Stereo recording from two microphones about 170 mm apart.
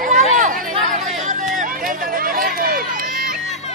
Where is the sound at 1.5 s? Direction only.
55° right (ahead or behind).